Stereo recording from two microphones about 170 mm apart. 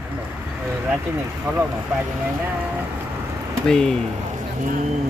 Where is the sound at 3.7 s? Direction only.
5° left (ahead or behind).